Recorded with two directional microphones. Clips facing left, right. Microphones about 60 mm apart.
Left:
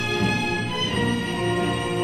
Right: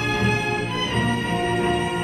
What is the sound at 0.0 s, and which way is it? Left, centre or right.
Music, right.